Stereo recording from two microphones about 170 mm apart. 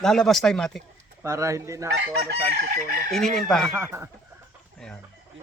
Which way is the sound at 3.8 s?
15° right (ahead or behind).